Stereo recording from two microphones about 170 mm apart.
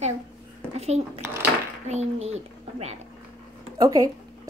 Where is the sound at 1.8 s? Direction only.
40° right (ahead or behind).